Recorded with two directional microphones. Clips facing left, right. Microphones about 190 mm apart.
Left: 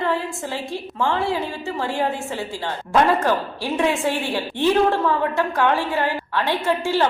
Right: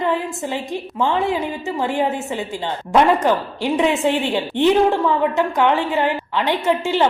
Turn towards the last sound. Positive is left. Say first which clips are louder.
# right 2 dB
turn(degrees=-20)  # may be behind; listen again after turning